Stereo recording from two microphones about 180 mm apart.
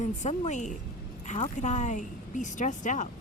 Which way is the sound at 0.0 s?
40° left (ahead or behind).